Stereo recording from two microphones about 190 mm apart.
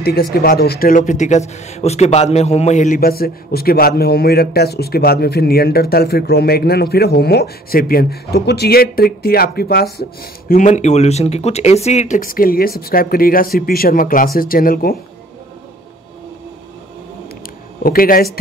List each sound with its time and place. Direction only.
0.0 s speech: 55° left (ahead or behind)
10.5 s speech: 40° left (ahead or behind)
17.8 s speech: 50° left (ahead or behind)